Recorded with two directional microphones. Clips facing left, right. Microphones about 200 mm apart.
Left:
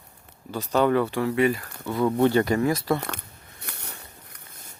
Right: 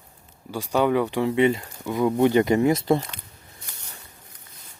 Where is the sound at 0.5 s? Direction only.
10° right (ahead or behind).